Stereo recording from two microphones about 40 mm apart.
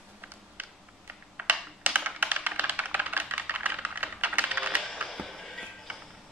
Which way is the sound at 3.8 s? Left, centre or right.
Right.